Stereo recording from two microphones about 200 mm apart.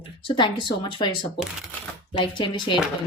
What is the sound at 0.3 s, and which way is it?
Speech, 25° left (ahead or behind).